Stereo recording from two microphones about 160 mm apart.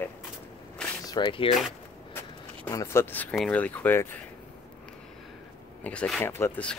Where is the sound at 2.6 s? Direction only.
20° left (ahead or behind).